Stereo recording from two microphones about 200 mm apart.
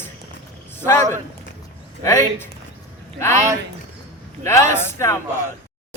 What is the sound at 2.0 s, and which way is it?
Speech, 10° left (ahead or behind).